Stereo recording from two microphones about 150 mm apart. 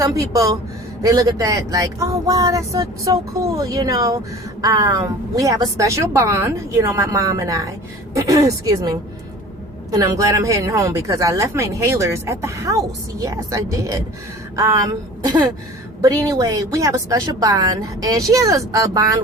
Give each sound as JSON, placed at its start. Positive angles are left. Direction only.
{"t": 0.0, "sound": "a woman's voice", "side_deg": -20}